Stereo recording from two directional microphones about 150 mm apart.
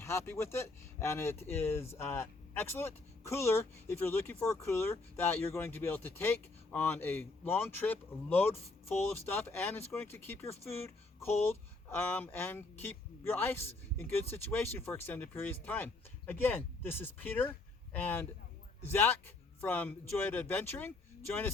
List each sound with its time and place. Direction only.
0.0 s speech: 15° left (ahead or behind)